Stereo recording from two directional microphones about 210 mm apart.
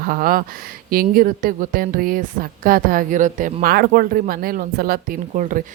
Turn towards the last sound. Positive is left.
turn(degrees=-40)  # may be behind; listen again after turning